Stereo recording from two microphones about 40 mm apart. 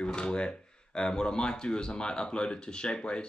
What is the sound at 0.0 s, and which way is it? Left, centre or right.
Speech, left.